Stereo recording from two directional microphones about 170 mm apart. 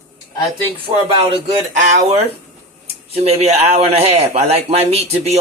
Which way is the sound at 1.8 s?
45° right (ahead or behind).